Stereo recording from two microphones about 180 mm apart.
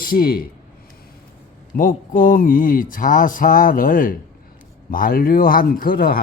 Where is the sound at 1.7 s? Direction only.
50° left (ahead or behind).